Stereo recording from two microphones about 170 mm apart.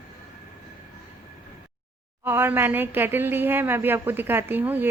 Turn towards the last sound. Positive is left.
turn(degrees=-10)  # may be behind; listen again after turning